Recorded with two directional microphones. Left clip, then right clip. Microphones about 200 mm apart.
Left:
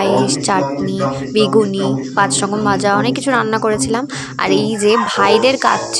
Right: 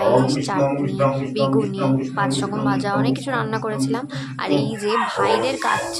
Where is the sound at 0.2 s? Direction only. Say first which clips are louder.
Left 4 dB; 35° left (ahead or behind).